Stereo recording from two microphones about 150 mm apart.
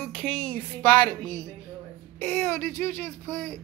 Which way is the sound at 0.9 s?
20° left (ahead or behind).